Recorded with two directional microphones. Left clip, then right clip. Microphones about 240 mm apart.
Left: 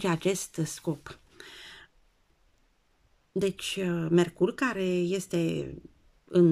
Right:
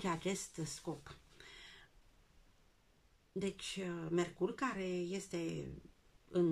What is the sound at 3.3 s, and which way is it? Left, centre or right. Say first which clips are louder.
Speech: left 12 dB; left.